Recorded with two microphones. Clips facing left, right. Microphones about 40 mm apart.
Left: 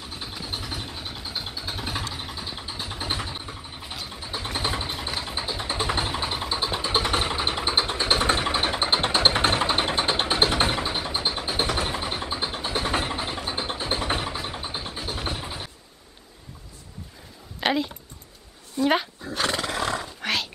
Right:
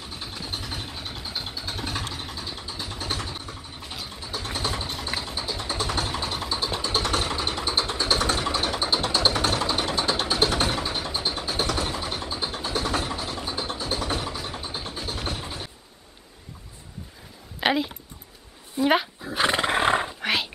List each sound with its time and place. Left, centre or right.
0.0 s vehicle: centre
3.9 s vehicle: centre
4.2 s a sound: centre
13.4 s vehicle: left
14.5 s a sound: centre
17.6 s a sound: centre
18.8 s dog: centre
19.3 s roar: right
20.2 s roaring cats: centre